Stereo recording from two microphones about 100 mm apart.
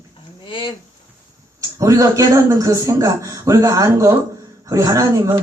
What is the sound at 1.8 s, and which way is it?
A man's voice, 35° right (ahead or behind).